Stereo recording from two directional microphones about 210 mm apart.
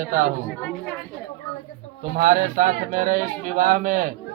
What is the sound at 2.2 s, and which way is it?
Speech, 40° right (ahead or behind).